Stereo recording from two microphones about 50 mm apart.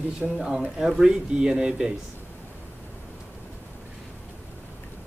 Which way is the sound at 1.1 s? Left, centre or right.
Centre.